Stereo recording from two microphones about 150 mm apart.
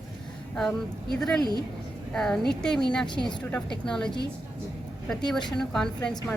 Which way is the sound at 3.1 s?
30° left (ahead or behind).